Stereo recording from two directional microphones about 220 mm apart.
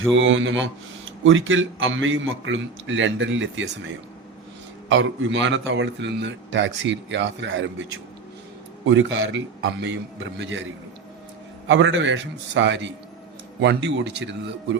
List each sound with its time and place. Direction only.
0.1 s speech: 60° right (ahead or behind)
8.9 s speech: 60° right (ahead or behind)
11.7 s speech: 55° right (ahead or behind)